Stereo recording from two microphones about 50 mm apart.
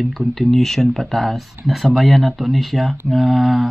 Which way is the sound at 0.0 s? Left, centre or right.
Centre.